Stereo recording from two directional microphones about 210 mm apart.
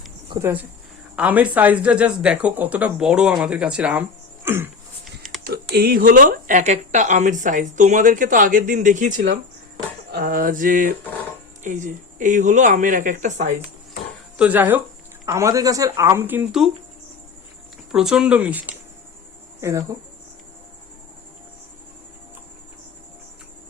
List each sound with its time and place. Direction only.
0.3 s speech: 15° right (ahead or behind)
4.4 s a sound: 10° right (ahead or behind)
5.4 s speech: 45° right (ahead or behind)
14.3 s speech: 5° right (ahead or behind)
17.9 s speech: 5° right (ahead or behind)